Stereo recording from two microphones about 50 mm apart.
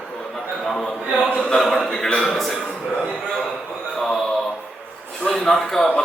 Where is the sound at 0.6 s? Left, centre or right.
Centre.